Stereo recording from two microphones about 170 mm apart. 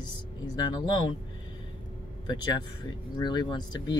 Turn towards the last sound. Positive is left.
turn(degrees=25)  # may be behind; listen again after turning